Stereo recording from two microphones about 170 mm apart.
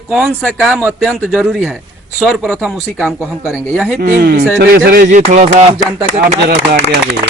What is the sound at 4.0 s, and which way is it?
Speech, 55° right (ahead or behind).